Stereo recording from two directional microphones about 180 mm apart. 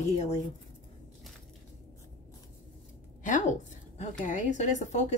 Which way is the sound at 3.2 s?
45° left (ahead or behind).